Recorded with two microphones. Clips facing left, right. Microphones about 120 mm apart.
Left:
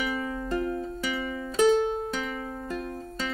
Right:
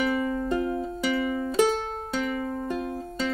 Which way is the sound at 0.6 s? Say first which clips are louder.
Right 2 dB; 25° right (ahead or behind).